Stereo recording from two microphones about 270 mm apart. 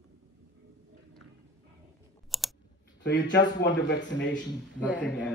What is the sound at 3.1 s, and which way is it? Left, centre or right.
Speech, centre.